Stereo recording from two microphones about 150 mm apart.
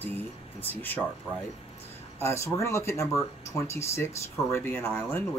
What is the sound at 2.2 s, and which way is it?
Speech, 20° left (ahead or behind).